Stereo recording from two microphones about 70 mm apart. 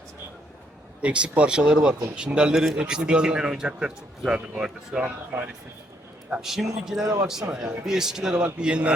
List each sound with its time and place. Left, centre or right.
1.0 s speech: centre
6.4 s speech: centre
7.0 s a man's voice: right
7.5 s speech: centre